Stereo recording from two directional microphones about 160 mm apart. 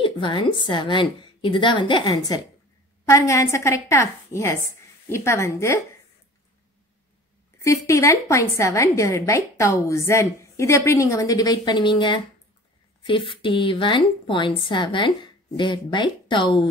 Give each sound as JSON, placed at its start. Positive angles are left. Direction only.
{"t": 0.0, "sound": "a woman's voice", "side_deg": 30}
{"t": 7.6, "sound": "a woman's voice", "side_deg": 20}